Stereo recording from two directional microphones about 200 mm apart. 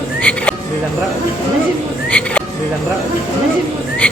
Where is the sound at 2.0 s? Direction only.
5° left (ahead or behind).